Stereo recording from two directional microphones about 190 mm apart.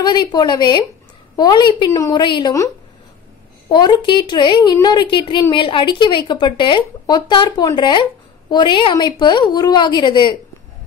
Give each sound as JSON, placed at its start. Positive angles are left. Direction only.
{"t": 0.0, "sound": "a woman's voice", "side_deg": 20}
{"t": 3.7, "sound": "a woman's voice", "side_deg": 25}